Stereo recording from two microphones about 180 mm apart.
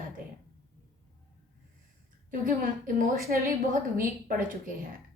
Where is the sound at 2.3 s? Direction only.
50° right (ahead or behind).